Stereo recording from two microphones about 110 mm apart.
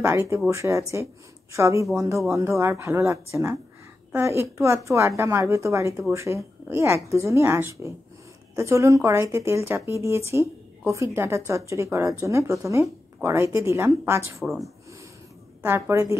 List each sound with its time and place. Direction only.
0.0 s speech: 25° right (ahead or behind)
14.4 s speech: centre (ahead or behind)
15.6 s speech: 25° right (ahead or behind)